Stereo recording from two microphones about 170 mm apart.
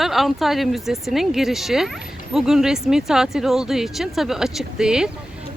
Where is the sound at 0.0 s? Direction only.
Centre (ahead or behind).